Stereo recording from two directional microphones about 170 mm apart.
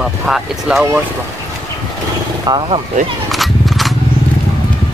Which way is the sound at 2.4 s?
30° right (ahead or behind).